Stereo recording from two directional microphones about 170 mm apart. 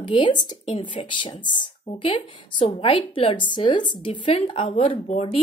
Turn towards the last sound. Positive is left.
turn(degrees=40)  # may be behind; listen again after turning